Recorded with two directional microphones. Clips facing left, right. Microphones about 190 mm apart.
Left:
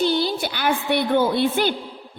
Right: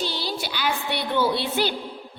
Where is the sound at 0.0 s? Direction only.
55° left (ahead or behind).